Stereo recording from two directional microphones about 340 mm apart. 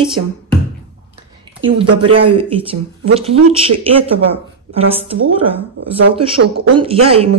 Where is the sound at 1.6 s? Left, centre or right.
Centre.